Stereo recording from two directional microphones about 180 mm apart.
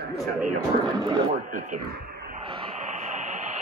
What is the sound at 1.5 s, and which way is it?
Speech, 45° right (ahead or behind).